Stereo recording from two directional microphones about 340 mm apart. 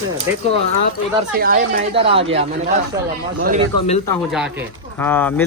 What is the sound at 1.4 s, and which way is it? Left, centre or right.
Speech, right.